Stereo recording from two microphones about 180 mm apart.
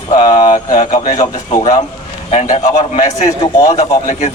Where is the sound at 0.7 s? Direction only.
35° left (ahead or behind).